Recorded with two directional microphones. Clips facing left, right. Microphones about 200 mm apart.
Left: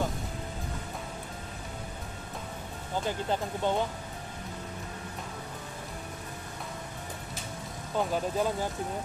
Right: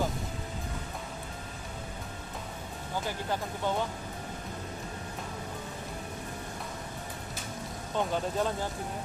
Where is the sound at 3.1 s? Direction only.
20° left (ahead or behind).